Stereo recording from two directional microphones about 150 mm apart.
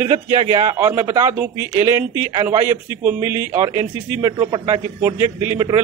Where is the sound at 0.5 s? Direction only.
20° right (ahead or behind).